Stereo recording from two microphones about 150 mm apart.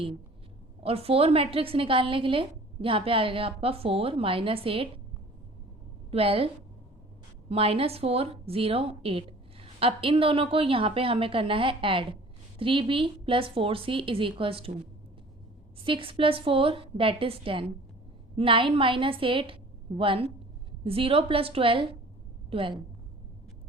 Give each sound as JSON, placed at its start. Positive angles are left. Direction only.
{"t": 0.8, "sound": "a woman's voice", "side_deg": -40}
{"t": 6.1, "sound": "a woman's voice", "side_deg": -40}
{"t": 7.5, "sound": "a woman's voice", "side_deg": -40}
{"t": 15.8, "sound": "a woman's voice", "side_deg": -35}